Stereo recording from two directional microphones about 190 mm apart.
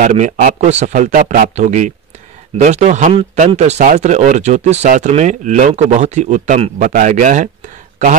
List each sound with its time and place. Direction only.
0.0 s speech: 40° right (ahead or behind)